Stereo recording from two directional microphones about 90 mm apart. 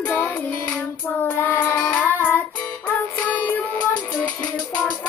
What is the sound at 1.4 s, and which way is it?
Child singing, 20° left (ahead or behind).